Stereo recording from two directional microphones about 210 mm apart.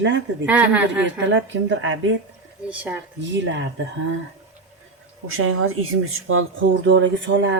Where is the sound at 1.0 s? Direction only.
65° right (ahead or behind).